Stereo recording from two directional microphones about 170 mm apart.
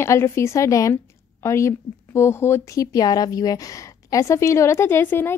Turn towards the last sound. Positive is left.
turn(degrees=15)  # may be behind; listen again after turning